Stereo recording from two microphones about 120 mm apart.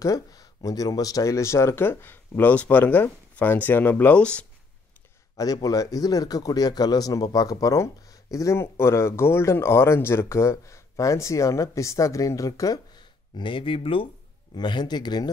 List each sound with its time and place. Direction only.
0.0 s speech: 30° left (ahead or behind); by 4.5 s 10° left (ahead or behind)
5.4 s speech: 30° left (ahead or behind); by 14.0 s 50° left (ahead or behind)
14.5 s speech: 35° left (ahead or behind)